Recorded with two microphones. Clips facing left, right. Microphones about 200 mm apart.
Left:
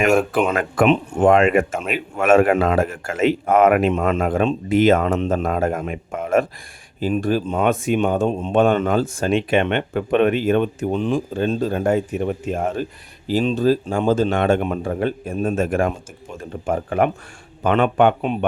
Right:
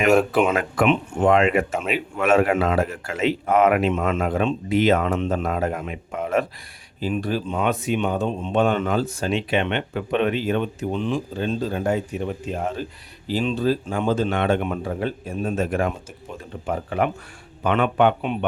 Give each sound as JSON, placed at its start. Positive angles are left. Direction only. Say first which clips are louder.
{"t": 0.1, "sound": "speech", "louder": "even", "side_deg": -5}
{"t": 0.5, "sound": "speech", "louder": "left 3 dB", "side_deg": 45}
{"t": 1.7, "sound": "speech", "louder": "even", "side_deg": 10}
{"t": 2.1, "sound": "speech", "louder": "left 4 dB", "side_deg": 50}
{"t": 13.2, "sound": "speech", "louder": "left 4 dB", "side_deg": 40}
{"t": 14.9, "sound": "speech", "louder": "left 4 dB", "side_deg": 50}